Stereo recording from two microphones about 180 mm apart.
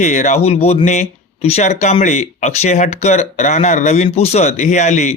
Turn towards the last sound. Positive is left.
turn(degrees=40)  # may be behind; listen again after turning